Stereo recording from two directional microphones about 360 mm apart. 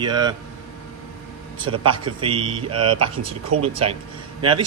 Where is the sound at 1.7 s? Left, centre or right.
Right.